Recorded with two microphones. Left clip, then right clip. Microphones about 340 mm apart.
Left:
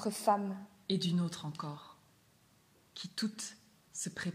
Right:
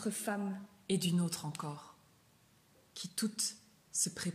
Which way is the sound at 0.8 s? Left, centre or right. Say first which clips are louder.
Even; centre.